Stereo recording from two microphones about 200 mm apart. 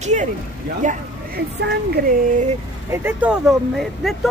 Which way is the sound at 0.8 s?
40° right (ahead or behind).